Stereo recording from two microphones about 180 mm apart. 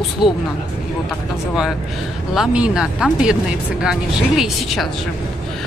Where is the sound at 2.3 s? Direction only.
5° right (ahead or behind).